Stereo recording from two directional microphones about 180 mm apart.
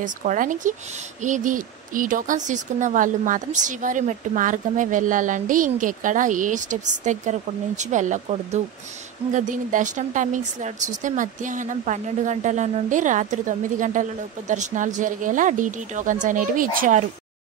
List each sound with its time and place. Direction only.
0.0 s speech: 45° right (ahead or behind)